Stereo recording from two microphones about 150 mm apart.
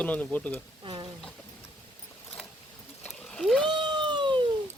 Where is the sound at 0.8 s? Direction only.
35° right (ahead or behind).